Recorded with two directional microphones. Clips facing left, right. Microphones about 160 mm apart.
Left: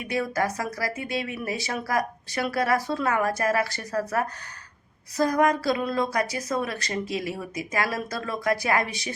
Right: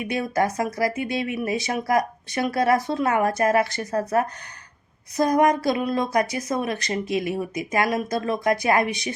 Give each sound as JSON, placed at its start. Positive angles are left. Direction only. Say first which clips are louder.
{"t": 0.0, "sound": "speech", "louder": "right 3 dB", "side_deg": -20}